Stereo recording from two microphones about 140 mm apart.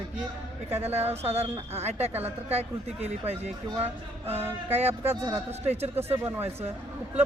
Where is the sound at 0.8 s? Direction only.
50° right (ahead or behind).